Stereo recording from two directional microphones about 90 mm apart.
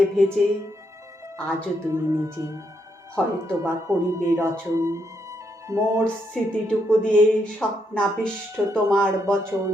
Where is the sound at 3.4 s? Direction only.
30° right (ahead or behind).